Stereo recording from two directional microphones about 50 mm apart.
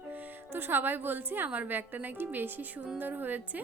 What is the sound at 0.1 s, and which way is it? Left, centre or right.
A woman's voice, right.